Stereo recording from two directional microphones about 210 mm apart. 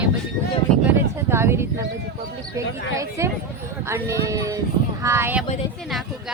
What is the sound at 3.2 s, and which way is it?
Speech, 15° right (ahead or behind).